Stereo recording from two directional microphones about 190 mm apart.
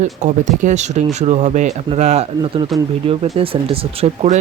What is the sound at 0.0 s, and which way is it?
Speech, 40° right (ahead or behind).